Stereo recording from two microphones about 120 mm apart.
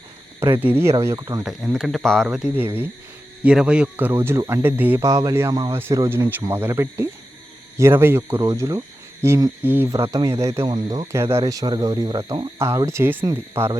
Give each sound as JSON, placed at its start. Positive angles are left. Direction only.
{"t": 0.6, "sound": "speech", "side_deg": -20}
{"t": 1.5, "sound": "speech", "side_deg": 0}
{"t": 5.0, "sound": "speech", "side_deg": -25}
{"t": 10.7, "sound": "speech", "side_deg": -40}
{"t": 11.1, "sound": "speech", "side_deg": -20}
{"t": 12.5, "sound": "speech", "side_deg": -20}